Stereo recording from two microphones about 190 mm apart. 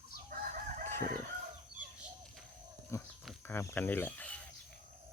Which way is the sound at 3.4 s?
10° left (ahead or behind).